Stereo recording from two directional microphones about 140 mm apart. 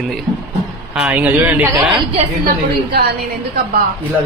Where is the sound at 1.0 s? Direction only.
10° right (ahead or behind).